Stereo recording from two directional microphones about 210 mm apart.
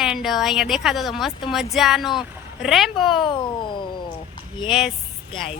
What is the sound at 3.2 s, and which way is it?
Speech, 25° left (ahead or behind).